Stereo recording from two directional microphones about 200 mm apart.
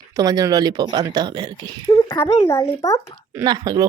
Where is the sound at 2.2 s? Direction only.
15° left (ahead or behind).